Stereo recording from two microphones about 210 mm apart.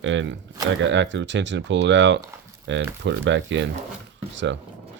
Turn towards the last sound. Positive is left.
turn(degrees=-60)  # may be behind; listen again after turning